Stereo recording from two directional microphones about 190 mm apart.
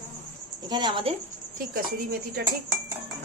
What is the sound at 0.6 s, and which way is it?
Speech, 20° right (ahead or behind).